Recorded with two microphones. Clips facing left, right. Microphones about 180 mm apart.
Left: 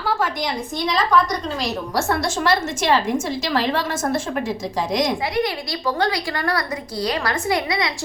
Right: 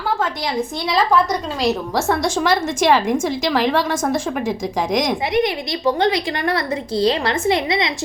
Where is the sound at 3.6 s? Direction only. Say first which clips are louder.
Right 3 dB; 15° right (ahead or behind).